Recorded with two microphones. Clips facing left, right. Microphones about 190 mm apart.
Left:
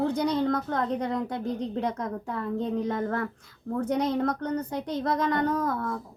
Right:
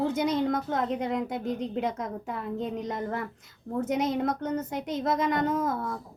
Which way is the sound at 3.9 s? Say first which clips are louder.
Left 1 dB; 20° right (ahead or behind).